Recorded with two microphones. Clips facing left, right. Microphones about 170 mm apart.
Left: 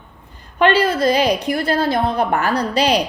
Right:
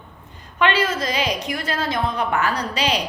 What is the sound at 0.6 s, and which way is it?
A woman's voice, 35° left (ahead or behind).